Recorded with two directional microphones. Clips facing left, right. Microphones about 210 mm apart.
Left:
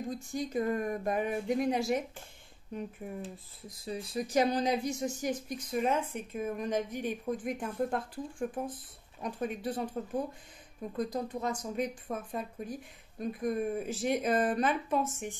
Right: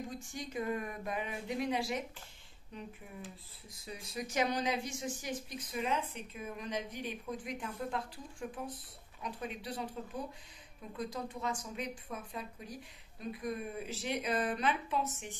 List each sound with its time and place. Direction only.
0.3 s a woman's voice: 40° left (ahead or behind)
3.8 s a woman's voice: 30° left (ahead or behind); by 9.8 s 50° left (ahead or behind)
11.0 s a woman's voice: 40° left (ahead or behind)